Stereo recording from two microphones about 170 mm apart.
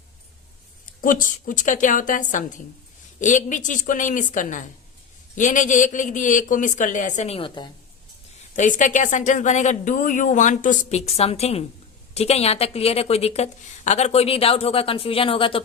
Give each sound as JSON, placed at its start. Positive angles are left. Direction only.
{"t": 1.0, "sound": "speech", "side_deg": 50}
{"t": 8.5, "sound": "a woman's voice", "side_deg": 45}